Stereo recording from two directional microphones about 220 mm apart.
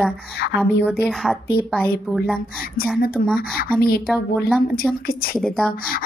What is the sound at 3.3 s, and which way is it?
Speech, 45° left (ahead or behind).